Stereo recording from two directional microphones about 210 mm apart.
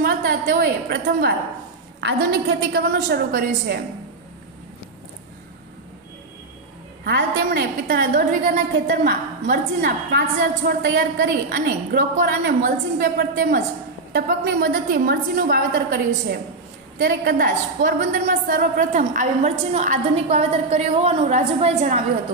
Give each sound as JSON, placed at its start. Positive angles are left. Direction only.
{"t": 0.0, "sound": "a woman's voice", "side_deg": -45}
{"t": 7.1, "sound": "a woman's voice", "side_deg": -50}